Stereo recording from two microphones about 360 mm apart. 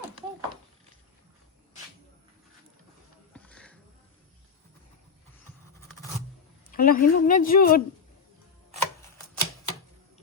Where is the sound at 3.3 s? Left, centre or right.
Centre.